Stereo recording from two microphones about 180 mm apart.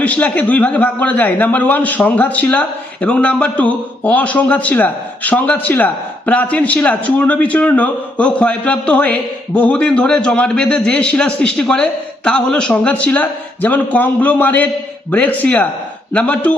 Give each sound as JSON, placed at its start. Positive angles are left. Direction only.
{"t": 0.0, "sound": "a man's voice", "side_deg": 5}